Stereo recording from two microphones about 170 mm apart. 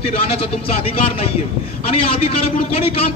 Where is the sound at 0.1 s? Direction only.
35° left (ahead or behind).